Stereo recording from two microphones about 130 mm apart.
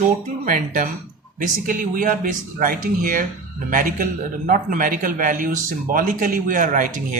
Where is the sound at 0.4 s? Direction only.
90° right.